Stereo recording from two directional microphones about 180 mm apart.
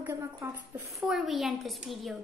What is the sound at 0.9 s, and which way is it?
A woman's voice, centre (ahead or behind).